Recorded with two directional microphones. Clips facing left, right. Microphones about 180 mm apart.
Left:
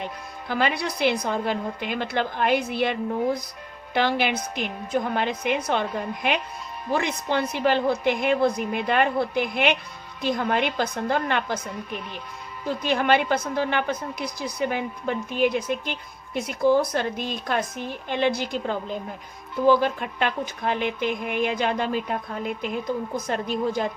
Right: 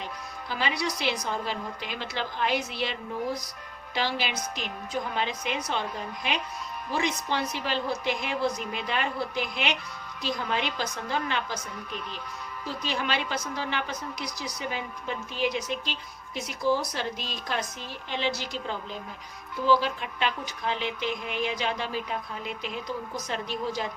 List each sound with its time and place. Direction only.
0.4 s a woman's voice: 55° left (ahead or behind)
6.9 s a woman's voice: 55° left (ahead or behind)
12.6 s a woman's voice: 55° left (ahead or behind)